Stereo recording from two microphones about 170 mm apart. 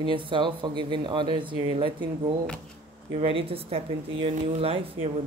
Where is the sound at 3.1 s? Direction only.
35° right (ahead or behind).